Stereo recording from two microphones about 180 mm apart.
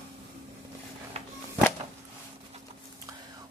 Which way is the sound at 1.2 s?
35° right (ahead or behind).